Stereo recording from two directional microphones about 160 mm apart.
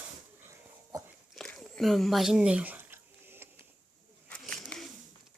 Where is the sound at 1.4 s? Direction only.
5° left (ahead or behind); by 3.5 s 15° right (ahead or behind).